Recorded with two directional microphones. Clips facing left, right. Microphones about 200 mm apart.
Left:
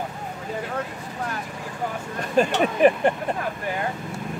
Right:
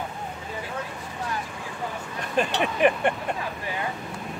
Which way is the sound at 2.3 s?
40° left (ahead or behind).